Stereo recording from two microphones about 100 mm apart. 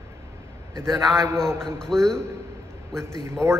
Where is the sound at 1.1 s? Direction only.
35° right (ahead or behind).